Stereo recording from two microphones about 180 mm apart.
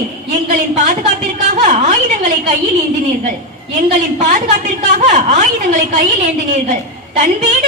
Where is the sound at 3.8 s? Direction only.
45° right (ahead or behind).